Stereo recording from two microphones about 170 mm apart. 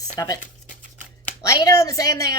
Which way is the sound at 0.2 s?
20° left (ahead or behind).